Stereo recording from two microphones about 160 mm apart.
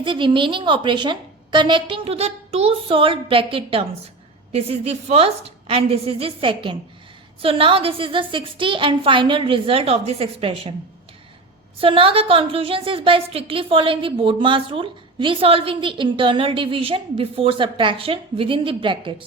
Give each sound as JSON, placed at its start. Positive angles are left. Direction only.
{"t": 0.0, "sound": "a woman's voice", "side_deg": -30}
{"t": 11.8, "sound": "a woman's voice", "side_deg": -35}